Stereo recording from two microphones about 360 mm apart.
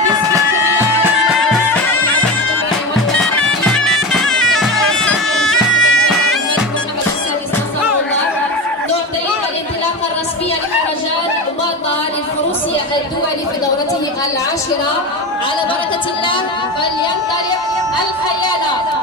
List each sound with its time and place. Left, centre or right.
1.5 s music: centre
3.2 s bagpipes: centre